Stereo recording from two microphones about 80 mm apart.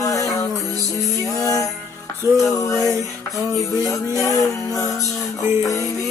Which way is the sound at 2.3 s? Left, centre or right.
Right.